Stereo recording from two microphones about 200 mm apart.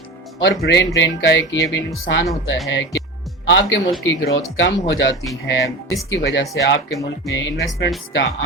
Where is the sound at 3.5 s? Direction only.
65° left (ahead or behind).